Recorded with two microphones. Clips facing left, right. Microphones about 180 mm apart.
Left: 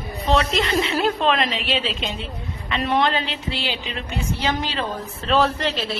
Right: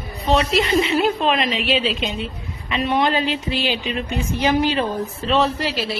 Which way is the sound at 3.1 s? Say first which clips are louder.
Right 5 dB; 15° right (ahead or behind).